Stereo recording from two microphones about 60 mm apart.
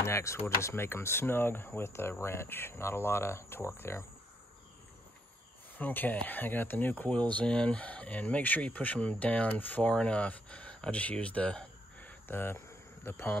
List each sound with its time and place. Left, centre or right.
0.0 s speech: left
5.8 s speech: left
9.8 s speech: centre; by 13.3 s left